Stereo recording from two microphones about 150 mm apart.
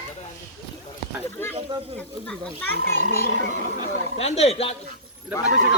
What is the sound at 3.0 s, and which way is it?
Speech, 50° right (ahead or behind).